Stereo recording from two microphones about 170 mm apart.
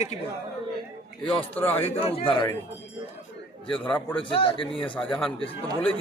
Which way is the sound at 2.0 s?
35° left (ahead or behind).